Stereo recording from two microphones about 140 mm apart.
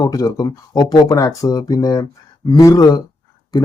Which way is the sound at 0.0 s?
25° left (ahead or behind).